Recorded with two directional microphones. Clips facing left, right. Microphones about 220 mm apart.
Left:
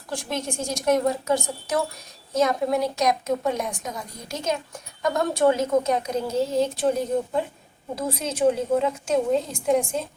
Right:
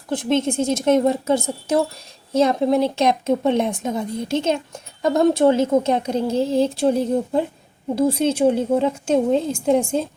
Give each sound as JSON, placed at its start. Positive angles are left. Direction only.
{"t": 0.1, "sound": "a woman's voice", "side_deg": -25}